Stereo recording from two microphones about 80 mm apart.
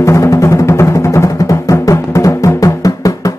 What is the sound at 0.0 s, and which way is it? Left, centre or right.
Music, left.